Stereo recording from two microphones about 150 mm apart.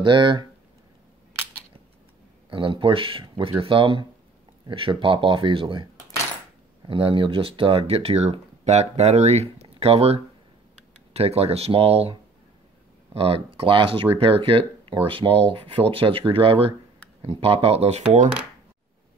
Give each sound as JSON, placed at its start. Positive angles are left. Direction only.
{"t": 0.0, "sound": "speech", "side_deg": -30}
{"t": 2.5, "sound": "speech", "side_deg": -35}
{"t": 6.9, "sound": "speech", "side_deg": -35}